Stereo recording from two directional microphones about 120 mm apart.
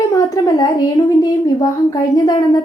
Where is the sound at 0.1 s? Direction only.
30° left (ahead or behind).